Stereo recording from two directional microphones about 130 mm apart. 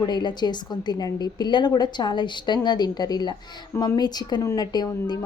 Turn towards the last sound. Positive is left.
turn(degrees=35)  # may be behind; listen again after turning